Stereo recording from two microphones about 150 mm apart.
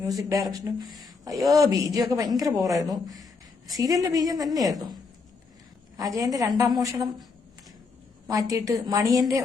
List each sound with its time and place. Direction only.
0.0 s a woman's voice: 25° right (ahead or behind)
6.0 s a woman's voice: 25° right (ahead or behind)
8.3 s a woman's voice: 20° right (ahead or behind)